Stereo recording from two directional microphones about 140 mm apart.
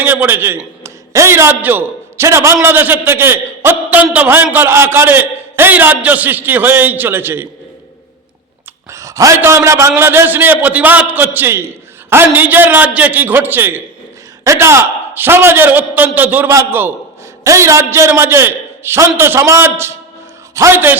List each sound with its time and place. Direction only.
0.0 s a man's voice: 15° right (ahead or behind)
8.9 s a man's voice: 25° right (ahead or behind)